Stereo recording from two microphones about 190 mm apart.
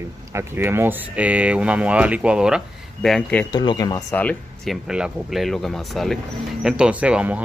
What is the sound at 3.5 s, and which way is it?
Speech, 20° left (ahead or behind).